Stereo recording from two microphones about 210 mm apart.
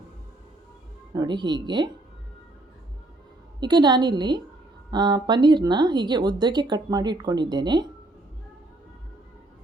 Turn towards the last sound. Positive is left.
turn(degrees=-20)  # may be behind; listen again after turning